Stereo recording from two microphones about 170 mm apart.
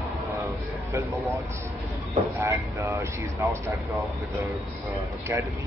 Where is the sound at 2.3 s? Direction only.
15° right (ahead or behind).